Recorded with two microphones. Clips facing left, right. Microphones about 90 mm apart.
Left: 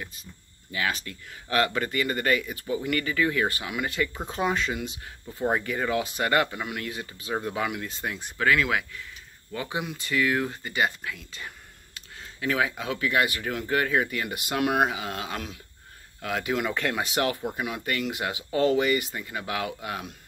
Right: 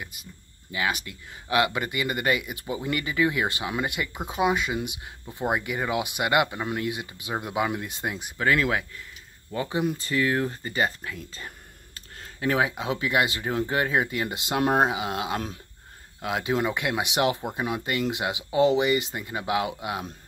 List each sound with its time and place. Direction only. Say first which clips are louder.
0.7 s speech: right 1 dB; 15° right (ahead or behind)
6.6 s speech: right 4 dB; 30° right (ahead or behind)
6.9 s speech: right 1 dB; 15° right (ahead or behind)
8.5 s speech: even; 30° right (ahead or behind)
15.3 s speech: right 4 dB; 35° right (ahead or behind)
16.2 s speech: right 2 dB; 20° right (ahead or behind)